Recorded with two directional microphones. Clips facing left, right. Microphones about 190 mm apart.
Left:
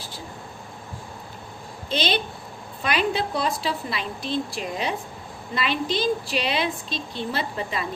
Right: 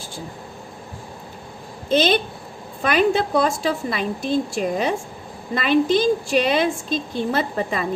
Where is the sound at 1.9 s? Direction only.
45° right (ahead or behind).